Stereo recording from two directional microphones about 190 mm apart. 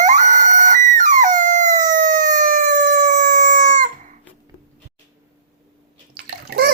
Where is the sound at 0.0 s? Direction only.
40° right (ahead or behind).